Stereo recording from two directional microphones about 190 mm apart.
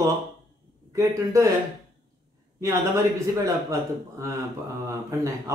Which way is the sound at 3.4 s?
15° right (ahead or behind).